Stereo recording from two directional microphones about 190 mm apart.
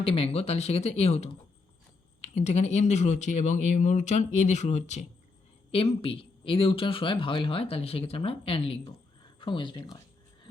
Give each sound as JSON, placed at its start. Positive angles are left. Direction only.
{"t": 0.0, "sound": "speech", "side_deg": 30}